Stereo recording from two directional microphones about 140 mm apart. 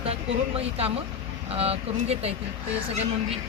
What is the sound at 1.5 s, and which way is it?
Speech, 45° right (ahead or behind).